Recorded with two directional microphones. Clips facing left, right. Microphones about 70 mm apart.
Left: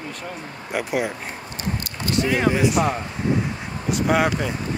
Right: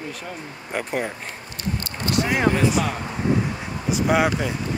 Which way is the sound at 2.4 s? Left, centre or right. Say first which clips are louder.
Even; centre.